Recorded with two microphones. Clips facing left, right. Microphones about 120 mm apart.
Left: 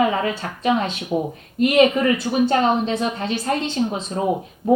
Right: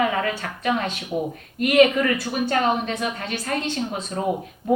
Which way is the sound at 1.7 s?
25° left (ahead or behind).